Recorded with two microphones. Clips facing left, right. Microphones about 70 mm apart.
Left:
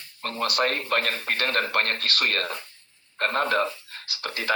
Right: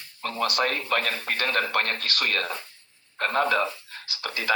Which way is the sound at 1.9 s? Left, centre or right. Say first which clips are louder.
Left 2 dB; right.